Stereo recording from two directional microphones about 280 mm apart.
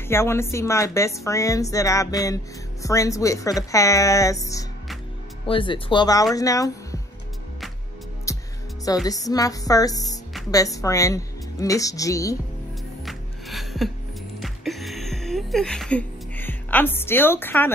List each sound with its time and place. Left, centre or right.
0.1 s a woman's voice: centre
8.3 s music: centre
8.8 s a woman's voice: centre
13.0 s music: centre